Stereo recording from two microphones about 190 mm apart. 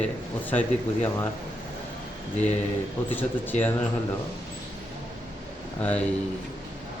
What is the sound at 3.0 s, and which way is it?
Speech, 10° left (ahead or behind).